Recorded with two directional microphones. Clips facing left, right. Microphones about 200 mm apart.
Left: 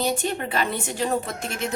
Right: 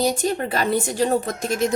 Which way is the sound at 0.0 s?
40° right (ahead or behind).